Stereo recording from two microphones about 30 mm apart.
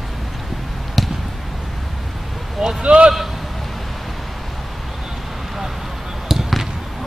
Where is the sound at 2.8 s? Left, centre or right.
Right.